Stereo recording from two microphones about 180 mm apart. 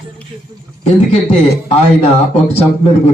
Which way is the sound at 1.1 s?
35° left (ahead or behind).